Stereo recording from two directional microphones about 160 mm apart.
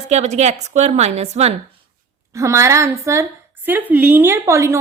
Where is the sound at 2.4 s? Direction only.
20° right (ahead or behind).